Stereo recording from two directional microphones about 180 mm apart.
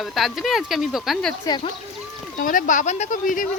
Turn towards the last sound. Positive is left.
turn(degrees=50)  # may be behind; listen again after turning